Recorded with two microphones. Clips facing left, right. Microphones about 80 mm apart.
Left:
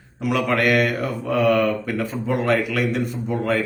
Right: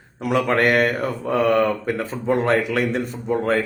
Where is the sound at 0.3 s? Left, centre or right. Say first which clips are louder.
Right 1 dB; right.